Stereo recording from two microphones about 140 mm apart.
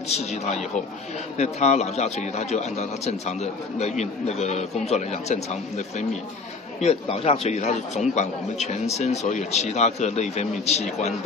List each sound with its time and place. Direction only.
0.1 s speech: 50° left (ahead or behind)